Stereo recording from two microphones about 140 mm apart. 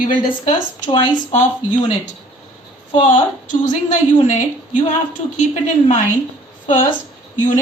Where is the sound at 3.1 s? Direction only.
65° left (ahead or behind).